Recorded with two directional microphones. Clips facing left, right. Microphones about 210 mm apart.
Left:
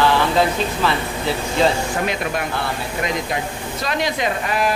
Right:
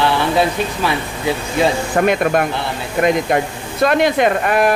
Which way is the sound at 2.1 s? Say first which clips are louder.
Right 8 dB; 55° right (ahead or behind).